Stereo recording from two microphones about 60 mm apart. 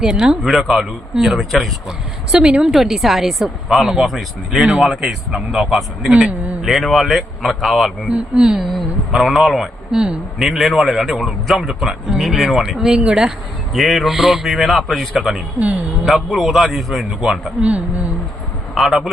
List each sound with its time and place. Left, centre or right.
0.0 s speech: centre
0.4 s a man's voice: centre
2.3 s a man's voice: centre
6.1 s a man's voice: centre
6.6 s a man's voice: centre
8.0 s speech: centre
8.7 s a man's voice: centre
13.7 s a man's voice: centre
17.6 s a man's voice: right
18.8 s a man's voice: centre